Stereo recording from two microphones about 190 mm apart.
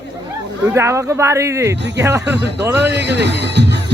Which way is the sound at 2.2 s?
65° right (ahead or behind).